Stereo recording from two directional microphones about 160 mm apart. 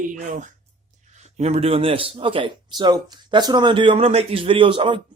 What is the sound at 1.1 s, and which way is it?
A man's voice, 45° right (ahead or behind).